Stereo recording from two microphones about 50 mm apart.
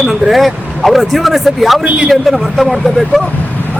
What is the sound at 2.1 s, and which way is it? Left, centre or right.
Speech, centre.